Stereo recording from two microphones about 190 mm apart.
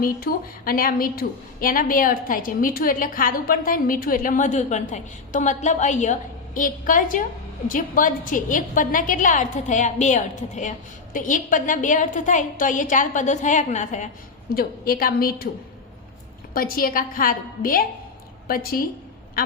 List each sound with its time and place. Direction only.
0.0 s a woman's voice: 50° left (ahead or behind)
14.5 s a woman's voice: 50° left (ahead or behind)
16.6 s a woman's voice: 50° left (ahead or behind)